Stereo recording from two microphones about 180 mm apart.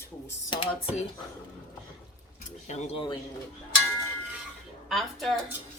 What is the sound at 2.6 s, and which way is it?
Speech, 40° left (ahead or behind).